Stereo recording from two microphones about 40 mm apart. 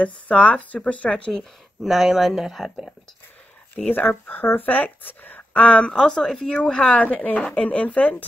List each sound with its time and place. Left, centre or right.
0.0 s a woman's voice: left
1.0 s speech: centre
1.8 s speech: centre
3.7 s speech: left
5.6 s a woman's voice: left
5.9 s speech: centre
6.6 s a woman's voice: left